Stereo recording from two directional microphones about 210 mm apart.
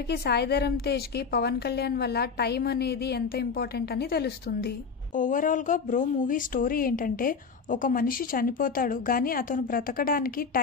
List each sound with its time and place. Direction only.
0.1 s a woman's voice: 50° left (ahead or behind)
5.1 s speech: 40° left (ahead or behind)